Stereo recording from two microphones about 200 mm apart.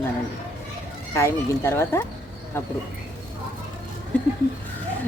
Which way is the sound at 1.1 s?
15° left (ahead or behind).